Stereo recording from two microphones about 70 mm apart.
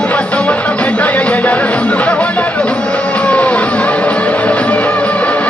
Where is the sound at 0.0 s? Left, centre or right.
Centre.